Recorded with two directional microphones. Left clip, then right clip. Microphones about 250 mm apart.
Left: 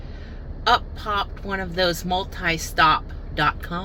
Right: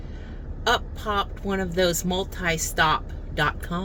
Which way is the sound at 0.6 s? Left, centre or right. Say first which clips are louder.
Left 4 dB; centre.